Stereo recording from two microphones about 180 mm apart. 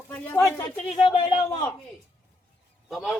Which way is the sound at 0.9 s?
30° left (ahead or behind).